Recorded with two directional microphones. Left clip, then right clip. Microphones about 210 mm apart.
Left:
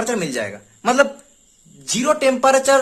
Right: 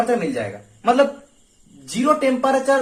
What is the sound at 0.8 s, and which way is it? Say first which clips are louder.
Speech: even; 60° left (ahead or behind).